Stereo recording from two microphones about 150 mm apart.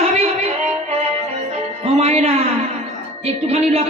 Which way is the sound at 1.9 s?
45° right (ahead or behind).